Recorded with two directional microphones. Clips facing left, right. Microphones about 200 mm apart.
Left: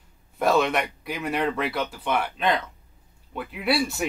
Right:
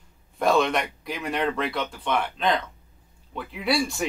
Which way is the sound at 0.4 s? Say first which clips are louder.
Even; 5° left (ahead or behind).